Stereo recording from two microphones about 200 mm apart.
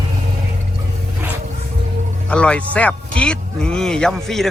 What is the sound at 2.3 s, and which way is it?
A man's voice, 5° left (ahead or behind).